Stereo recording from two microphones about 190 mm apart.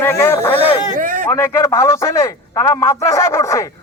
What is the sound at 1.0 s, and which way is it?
Speech, 45° right (ahead or behind).